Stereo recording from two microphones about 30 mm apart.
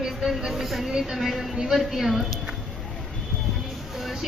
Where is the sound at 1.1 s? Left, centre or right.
Centre.